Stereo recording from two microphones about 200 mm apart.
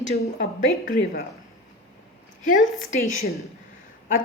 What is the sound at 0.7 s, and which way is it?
Speech, 30° left (ahead or behind).